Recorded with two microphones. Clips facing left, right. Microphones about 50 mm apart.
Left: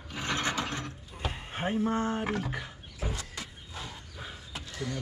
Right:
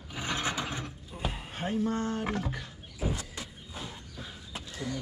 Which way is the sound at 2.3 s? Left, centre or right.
Centre.